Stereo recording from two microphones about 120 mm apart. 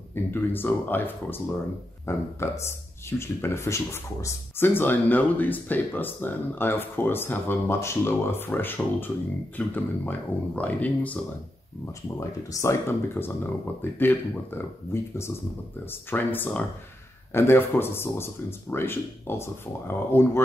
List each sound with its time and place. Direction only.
0.1 s speech: 15° left (ahead or behind)
11.8 s speech: 25° left (ahead or behind)